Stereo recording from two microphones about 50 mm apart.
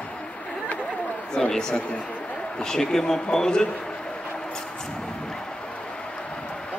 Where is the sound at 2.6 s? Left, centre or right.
Centre.